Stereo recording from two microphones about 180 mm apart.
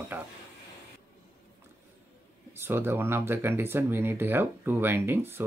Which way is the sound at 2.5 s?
10° right (ahead or behind).